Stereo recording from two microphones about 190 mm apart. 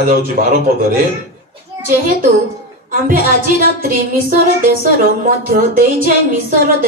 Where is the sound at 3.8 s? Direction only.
50° right (ahead or behind).